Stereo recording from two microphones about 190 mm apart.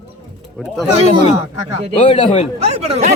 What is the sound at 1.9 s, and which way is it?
Speech, 30° left (ahead or behind).